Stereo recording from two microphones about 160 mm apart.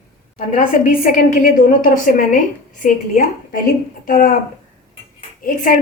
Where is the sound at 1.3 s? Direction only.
60° left (ahead or behind).